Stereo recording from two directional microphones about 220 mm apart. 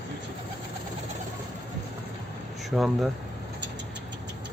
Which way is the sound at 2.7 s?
Centre (ahead or behind).